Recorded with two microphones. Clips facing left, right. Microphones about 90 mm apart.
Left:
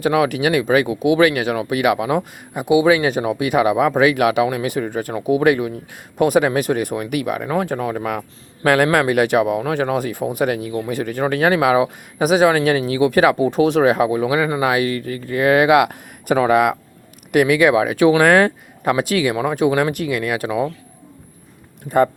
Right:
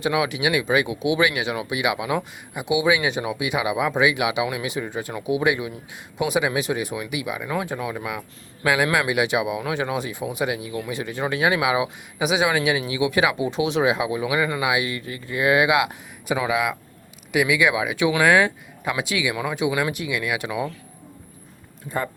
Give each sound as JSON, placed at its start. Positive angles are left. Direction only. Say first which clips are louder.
{"t": 0.0, "sound": "speech", "louder": "left 5 dB", "side_deg": 45}
{"t": 21.8, "sound": "speech", "louder": "left 12 dB", "side_deg": 70}